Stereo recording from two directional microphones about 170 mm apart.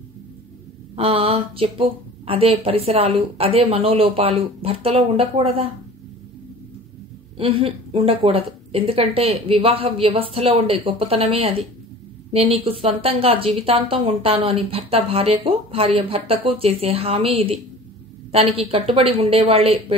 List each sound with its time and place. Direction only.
0.9 s a woman's voice: 35° right (ahead or behind)
7.3 s a woman's voice: 35° right (ahead or behind)